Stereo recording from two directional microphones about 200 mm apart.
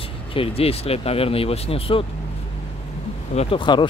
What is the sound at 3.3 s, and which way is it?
Speech, 25° left (ahead or behind).